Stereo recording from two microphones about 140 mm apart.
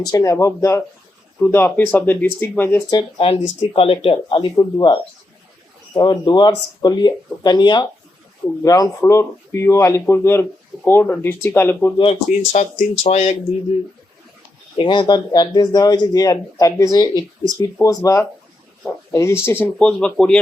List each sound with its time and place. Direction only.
0.1 s speech: 25° left (ahead or behind)
2.9 s speech: 40° left (ahead or behind); by 11.9 s 15° left (ahead or behind)
11.9 s speech: 45° left (ahead or behind)
14.8 s speech: 35° left (ahead or behind); by 20.4 s 5° left (ahead or behind)